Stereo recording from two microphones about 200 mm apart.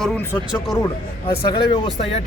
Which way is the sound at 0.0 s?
5° left (ahead or behind).